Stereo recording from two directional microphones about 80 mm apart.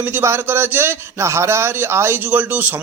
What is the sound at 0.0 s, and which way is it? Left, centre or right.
A man's voice, right.